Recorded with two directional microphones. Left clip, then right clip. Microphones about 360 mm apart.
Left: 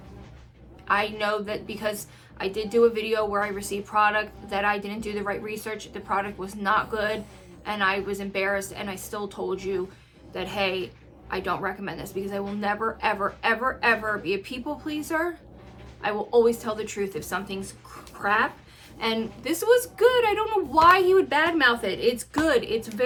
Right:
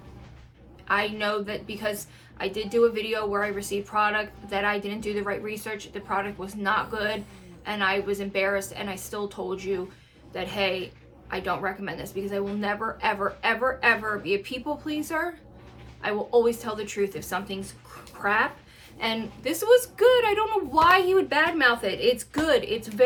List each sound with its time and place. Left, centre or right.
0.9 s a woman's voice: centre